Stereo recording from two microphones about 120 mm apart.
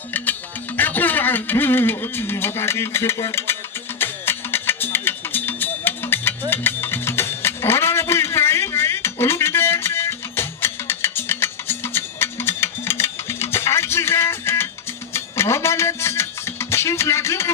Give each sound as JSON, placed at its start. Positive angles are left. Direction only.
{"t": 0.8, "sound": "music", "side_deg": 15}